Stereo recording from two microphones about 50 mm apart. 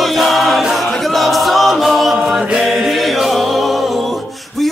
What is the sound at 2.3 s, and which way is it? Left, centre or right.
Mantra, centre.